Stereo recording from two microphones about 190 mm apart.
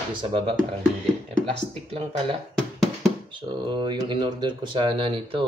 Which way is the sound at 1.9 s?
30° right (ahead or behind).